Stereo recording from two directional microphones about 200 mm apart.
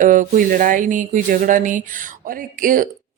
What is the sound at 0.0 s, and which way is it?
A woman's voice, 40° right (ahead or behind).